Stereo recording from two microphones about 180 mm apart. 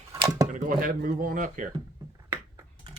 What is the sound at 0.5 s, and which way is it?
Speech, 55° right (ahead or behind).